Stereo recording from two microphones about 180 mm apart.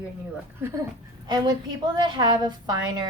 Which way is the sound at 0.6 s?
15° right (ahead or behind).